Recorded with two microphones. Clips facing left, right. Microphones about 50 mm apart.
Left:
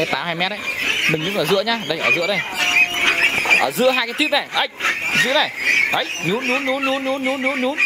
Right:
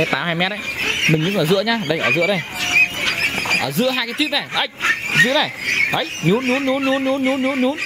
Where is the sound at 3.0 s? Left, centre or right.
Left.